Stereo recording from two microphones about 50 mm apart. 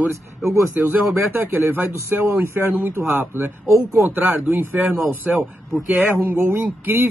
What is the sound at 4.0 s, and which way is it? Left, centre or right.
Speech, right.